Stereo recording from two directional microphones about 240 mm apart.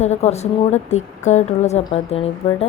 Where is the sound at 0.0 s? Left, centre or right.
Left.